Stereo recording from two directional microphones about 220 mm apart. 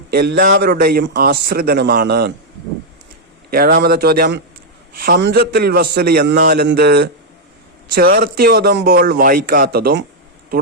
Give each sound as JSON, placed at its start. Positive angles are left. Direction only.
{"t": 0.1, "sound": "a man's voice", "side_deg": -45}
{"t": 3.5, "sound": "a man's voice", "side_deg": -40}